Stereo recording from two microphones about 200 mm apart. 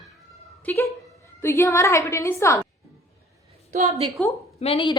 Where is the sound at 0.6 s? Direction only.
10° left (ahead or behind).